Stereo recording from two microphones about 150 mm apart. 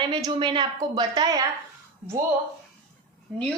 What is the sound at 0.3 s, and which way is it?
A woman's voice, 30° right (ahead or behind).